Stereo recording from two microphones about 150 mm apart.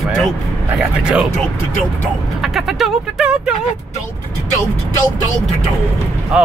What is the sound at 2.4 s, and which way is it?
Speech, centre (ahead or behind).